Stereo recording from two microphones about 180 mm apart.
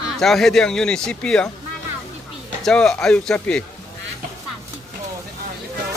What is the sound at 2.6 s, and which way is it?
Speech, centre (ahead or behind).